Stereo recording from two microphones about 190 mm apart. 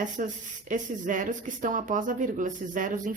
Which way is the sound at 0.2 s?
40° right (ahead or behind).